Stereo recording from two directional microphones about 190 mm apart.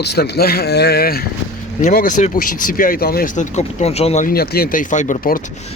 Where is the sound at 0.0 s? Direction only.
60° left (ahead or behind); by 4.3 s 35° left (ahead or behind).